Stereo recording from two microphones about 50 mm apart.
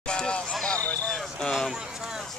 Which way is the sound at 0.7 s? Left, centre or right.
Left.